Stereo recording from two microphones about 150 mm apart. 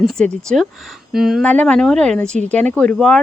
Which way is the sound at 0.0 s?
5° left (ahead or behind).